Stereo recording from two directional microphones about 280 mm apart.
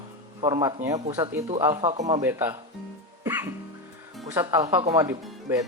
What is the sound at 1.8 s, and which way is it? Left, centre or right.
Speech, right.